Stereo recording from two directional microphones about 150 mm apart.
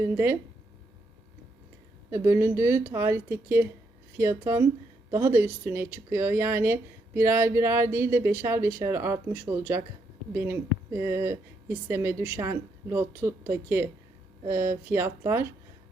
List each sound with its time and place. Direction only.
0.0 s speech: 15° right (ahead or behind)
2.0 s speech: 20° right (ahead or behind)